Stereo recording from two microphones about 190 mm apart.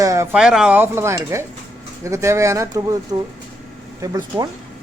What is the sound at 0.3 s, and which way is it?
Speech, 5° right (ahead or behind).